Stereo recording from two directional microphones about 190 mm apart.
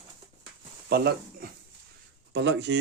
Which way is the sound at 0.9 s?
55° right (ahead or behind).